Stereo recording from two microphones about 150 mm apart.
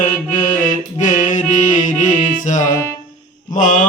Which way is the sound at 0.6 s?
60° left (ahead or behind).